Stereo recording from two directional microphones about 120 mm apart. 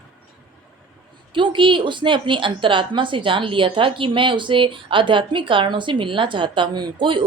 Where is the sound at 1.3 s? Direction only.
45° right (ahead or behind).